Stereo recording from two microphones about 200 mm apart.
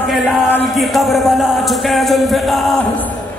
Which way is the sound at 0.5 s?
5° left (ahead or behind).